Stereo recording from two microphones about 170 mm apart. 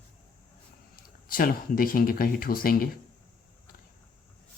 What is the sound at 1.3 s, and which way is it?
Speech, 55° left (ahead or behind).